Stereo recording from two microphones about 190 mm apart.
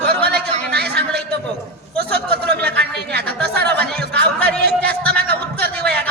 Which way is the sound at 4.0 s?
60° right (ahead or behind).